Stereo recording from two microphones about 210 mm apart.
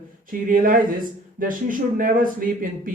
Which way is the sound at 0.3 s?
40° right (ahead or behind).